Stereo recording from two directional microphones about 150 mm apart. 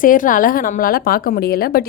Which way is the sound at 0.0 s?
65° left (ahead or behind).